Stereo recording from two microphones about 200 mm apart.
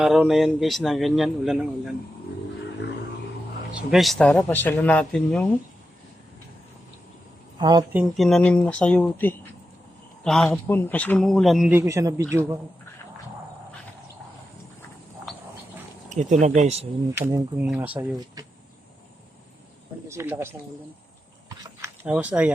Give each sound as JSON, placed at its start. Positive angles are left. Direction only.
{"t": 0.0, "sound": "a man's voice", "side_deg": 0}
{"t": 3.9, "sound": "speech", "side_deg": 0}
{"t": 7.6, "sound": "speech", "side_deg": -20}
{"t": 7.9, "sound": "a man's voice", "side_deg": 0}
{"t": 11.7, "sound": "speech", "side_deg": -15}
{"t": 16.0, "sound": "speech", "side_deg": -35}
{"t": 17.2, "sound": "speech", "side_deg": -10}
{"t": 20.1, "sound": "speech", "side_deg": -10}
{"t": 22.0, "sound": "speech", "side_deg": -5}